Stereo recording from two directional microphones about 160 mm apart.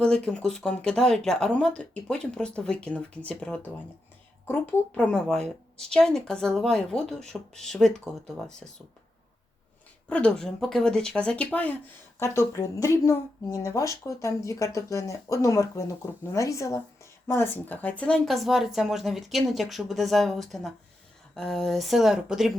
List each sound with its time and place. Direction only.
0.0 s a woman's voice: 5° left (ahead or behind)
10.1 s a woman's voice: 5° left (ahead or behind)